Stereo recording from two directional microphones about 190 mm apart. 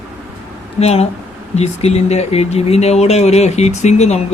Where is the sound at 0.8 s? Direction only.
35° left (ahead or behind).